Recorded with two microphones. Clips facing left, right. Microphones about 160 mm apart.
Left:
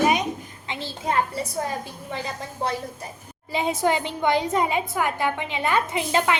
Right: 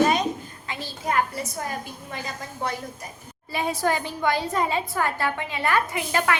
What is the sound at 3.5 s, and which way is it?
A woman's voice, 20° left (ahead or behind).